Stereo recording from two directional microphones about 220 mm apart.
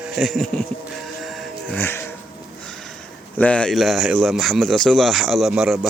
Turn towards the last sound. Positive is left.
turn(degrees=0)  # may be behind; listen again after turning